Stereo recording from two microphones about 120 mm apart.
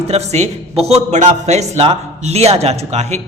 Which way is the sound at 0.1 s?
65° right (ahead or behind).